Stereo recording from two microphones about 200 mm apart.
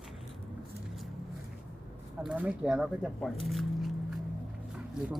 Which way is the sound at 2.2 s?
5° right (ahead or behind).